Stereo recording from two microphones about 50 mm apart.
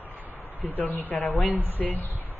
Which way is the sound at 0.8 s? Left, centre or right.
Left.